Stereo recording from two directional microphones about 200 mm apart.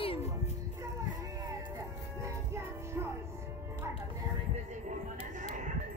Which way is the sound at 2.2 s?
15° right (ahead or behind).